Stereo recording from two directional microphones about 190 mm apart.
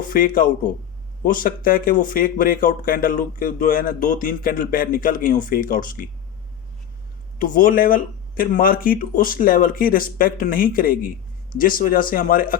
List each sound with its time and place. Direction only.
0.0 s a man's voice: 50° left (ahead or behind)
7.3 s speech: 45° left (ahead or behind)